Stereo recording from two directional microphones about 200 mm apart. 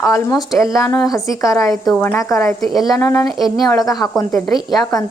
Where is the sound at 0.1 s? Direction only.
20° left (ahead or behind).